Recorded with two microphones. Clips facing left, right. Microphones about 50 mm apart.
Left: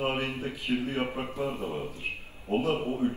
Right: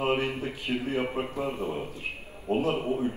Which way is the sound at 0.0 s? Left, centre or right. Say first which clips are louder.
Right 3 dB; right.